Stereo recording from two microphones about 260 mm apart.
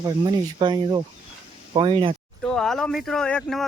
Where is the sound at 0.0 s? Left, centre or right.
Centre.